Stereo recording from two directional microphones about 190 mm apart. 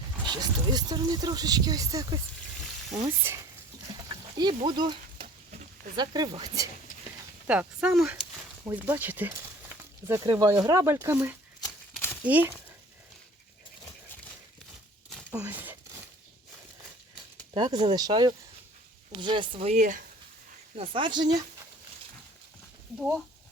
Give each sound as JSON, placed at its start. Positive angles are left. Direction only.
{"t": 0.2, "sound": "speech", "side_deg": -20}
{"t": 3.3, "sound": "speech", "side_deg": -10}
{"t": 4.4, "sound": "speech", "side_deg": -20}
{"t": 5.2, "sound": "a sound", "side_deg": -45}
{"t": 6.0, "sound": "speech", "side_deg": -20}
{"t": 7.4, "sound": "speech", "side_deg": -5}
{"t": 15.4, "sound": "a sound", "side_deg": -10}
{"t": 17.5, "sound": "speech", "side_deg": -25}
{"t": 20.7, "sound": "speech", "side_deg": -30}
{"t": 23.0, "sound": "speech", "side_deg": 0}